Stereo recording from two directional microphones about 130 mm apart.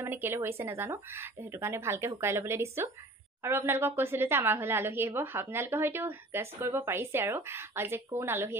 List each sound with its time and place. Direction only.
0.0 s a woman's voice: 15° right (ahead or behind)